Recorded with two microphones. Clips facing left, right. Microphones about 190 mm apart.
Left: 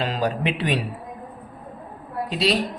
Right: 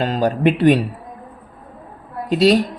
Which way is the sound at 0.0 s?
45° right (ahead or behind).